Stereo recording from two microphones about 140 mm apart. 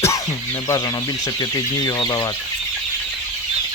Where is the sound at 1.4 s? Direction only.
30° left (ahead or behind).